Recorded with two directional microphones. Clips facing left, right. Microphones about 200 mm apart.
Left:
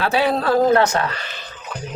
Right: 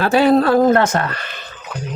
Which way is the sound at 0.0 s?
45° right (ahead or behind).